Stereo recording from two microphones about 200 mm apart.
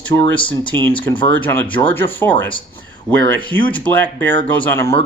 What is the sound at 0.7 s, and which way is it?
Speech, 10° left (ahead or behind).